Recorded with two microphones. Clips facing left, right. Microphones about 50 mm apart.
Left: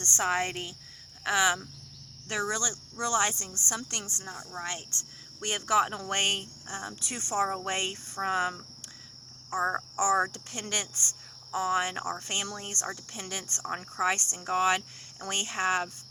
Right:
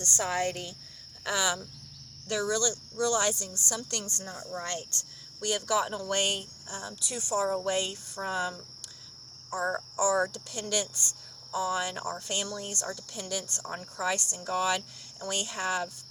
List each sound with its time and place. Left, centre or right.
0.0 s speech: left